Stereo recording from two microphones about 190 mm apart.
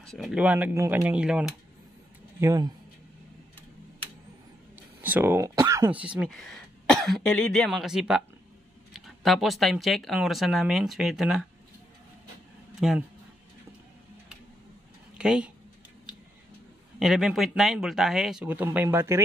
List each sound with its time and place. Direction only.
0.0 s speech: centre (ahead or behind)
2.4 s speech: 20° right (ahead or behind)
5.0 s speech: 10° right (ahead or behind)
12.8 s speech: centre (ahead or behind)
15.1 s speech: 5° right (ahead or behind)
17.0 s speech: centre (ahead or behind)